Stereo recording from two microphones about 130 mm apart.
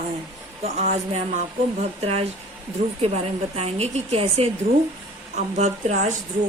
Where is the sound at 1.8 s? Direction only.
55° right (ahead or behind).